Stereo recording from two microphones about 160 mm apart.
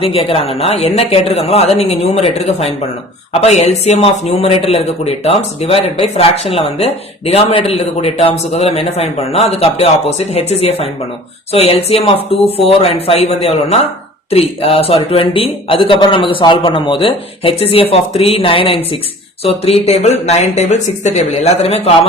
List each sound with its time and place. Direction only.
0.0 s speech: 35° left (ahead or behind)